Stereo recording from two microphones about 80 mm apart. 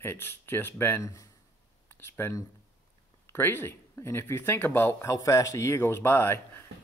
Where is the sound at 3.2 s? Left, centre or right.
Left.